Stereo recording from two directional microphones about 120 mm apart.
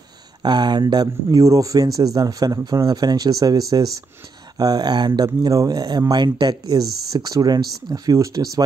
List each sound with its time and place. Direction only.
0.4 s speech: 40° right (ahead or behind)